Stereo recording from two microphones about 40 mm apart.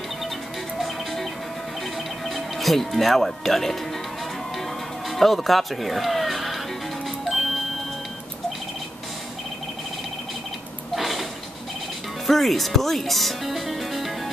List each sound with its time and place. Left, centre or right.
2.2 s speech: centre
5.1 s speech: centre
11.0 s a sound: centre
12.3 s speech: centre